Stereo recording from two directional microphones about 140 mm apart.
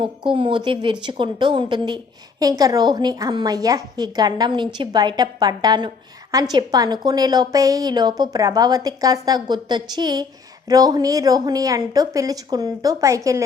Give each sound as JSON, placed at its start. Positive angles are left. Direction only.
{"t": 0.0, "sound": "a woman's voice", "side_deg": -35}